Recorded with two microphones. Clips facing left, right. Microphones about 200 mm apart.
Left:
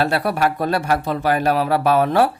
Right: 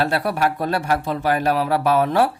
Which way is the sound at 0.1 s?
65° left (ahead or behind).